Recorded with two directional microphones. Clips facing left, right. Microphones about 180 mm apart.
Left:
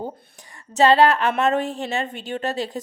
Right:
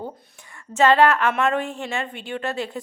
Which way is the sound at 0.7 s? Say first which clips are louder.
Left 1 dB; 35° left (ahead or behind).